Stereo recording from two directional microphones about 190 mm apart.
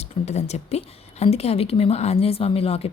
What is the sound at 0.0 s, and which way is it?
Speech, 35° left (ahead or behind).